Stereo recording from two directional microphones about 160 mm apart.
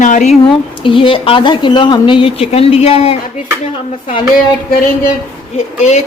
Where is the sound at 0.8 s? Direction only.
35° left (ahead or behind).